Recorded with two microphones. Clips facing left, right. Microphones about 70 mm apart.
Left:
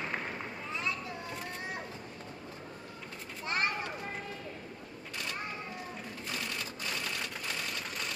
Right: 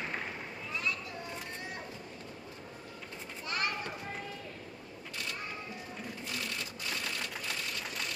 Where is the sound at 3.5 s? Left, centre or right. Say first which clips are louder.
Left 2 dB; left.